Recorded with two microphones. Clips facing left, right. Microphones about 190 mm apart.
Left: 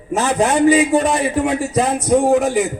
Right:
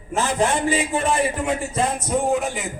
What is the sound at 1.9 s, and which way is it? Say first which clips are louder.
Speech: left 10 dB; 75° left (ahead or behind).